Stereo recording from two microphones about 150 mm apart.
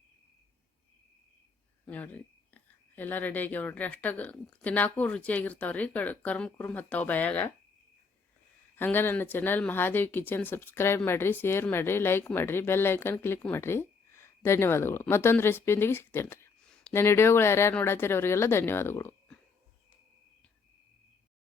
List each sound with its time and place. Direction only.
1.8 s speech: 10° left (ahead or behind)
8.7 s speech: 15° left (ahead or behind)
16.6 s a sound: 5° left (ahead or behind)
16.9 s speech: 15° left (ahead or behind)